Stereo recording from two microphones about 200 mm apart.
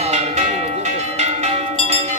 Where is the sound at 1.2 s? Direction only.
35° right (ahead or behind).